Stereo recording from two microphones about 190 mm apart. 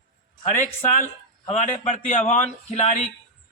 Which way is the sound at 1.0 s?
35° left (ahead or behind).